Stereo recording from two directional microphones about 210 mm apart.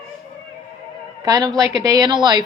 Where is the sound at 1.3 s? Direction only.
20° right (ahead or behind).